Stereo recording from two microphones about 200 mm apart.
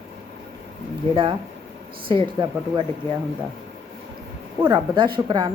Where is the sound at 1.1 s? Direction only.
25° right (ahead or behind).